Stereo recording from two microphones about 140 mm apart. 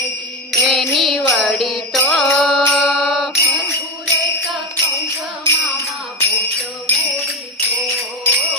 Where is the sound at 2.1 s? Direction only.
Centre (ahead or behind).